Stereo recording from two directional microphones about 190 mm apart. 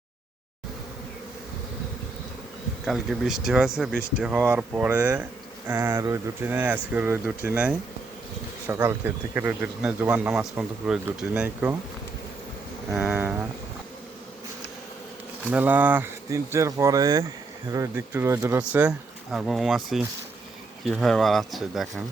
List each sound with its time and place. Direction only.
2.8 s speech: centre (ahead or behind)
12.9 s speech: 5° right (ahead or behind)
15.4 s speech: 10° right (ahead or behind)